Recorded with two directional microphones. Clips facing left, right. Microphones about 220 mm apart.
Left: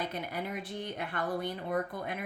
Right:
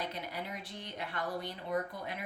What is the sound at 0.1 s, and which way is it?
Speech, 50° left (ahead or behind).